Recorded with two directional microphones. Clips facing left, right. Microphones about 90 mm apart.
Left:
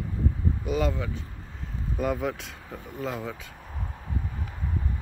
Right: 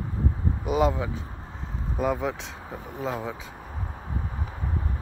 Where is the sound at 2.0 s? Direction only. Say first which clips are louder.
Right 2 dB; centre (ahead or behind).